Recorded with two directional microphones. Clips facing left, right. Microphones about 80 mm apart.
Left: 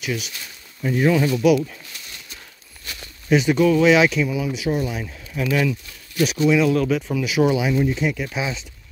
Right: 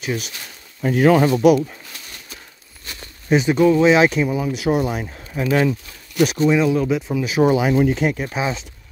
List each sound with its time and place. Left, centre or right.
0.8 s speech: right
1.3 s speech: right
2.9 s speech: right
4.1 s speech: right
4.6 s speech: right
5.0 s speech: right
6.7 s speech: centre
7.2 s speech: right
7.7 s speech: right